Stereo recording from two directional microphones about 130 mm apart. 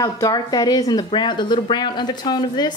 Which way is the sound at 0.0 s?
30° left (ahead or behind).